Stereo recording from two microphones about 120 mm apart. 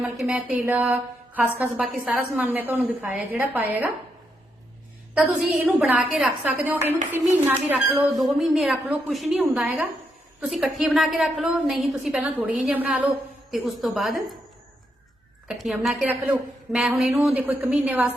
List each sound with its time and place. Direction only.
0.2 s a woman's voice: 5° right (ahead or behind)
5.1 s a woman's voice: 5° right (ahead or behind)
6.4 s a woman's voice: 15° right (ahead or behind)
8.1 s a woman's voice: centre (ahead or behind)
13.5 s a woman's voice: centre (ahead or behind)
15.4 s a woman's voice: 5° right (ahead or behind)
16.0 s a woman's voice: 15° right (ahead or behind)
16.7 s a woman's voice: centre (ahead or behind)
17.3 s a woman's voice: 15° right (ahead or behind)